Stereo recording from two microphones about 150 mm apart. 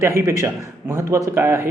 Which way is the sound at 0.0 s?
20° right (ahead or behind).